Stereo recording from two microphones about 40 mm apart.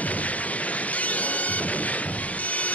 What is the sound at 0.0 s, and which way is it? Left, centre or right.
Music, left.